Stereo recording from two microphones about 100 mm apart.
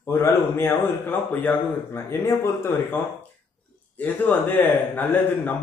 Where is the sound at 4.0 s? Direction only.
20° left (ahead or behind).